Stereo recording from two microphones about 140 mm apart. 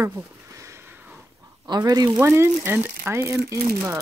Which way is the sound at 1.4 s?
30° right (ahead or behind).